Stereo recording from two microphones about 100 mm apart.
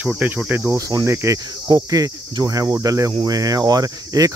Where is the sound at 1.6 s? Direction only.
35° right (ahead or behind).